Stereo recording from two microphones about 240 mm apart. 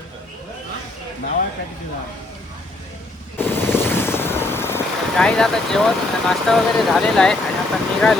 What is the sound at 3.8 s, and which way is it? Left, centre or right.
Vehicle, centre.